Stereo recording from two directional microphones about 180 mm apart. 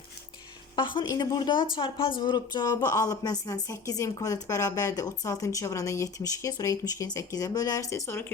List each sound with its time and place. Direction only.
0.8 s a woman's voice: 20° left (ahead or behind)